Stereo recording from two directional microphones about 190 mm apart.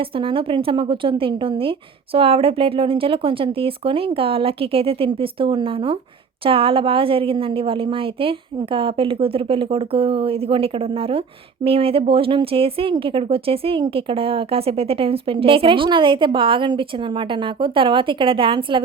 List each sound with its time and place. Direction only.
0.0 s a woman's voice: 25° right (ahead or behind)